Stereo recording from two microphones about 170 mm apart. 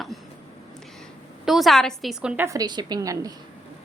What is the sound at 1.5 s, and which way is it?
A woman's voice, centre (ahead or behind).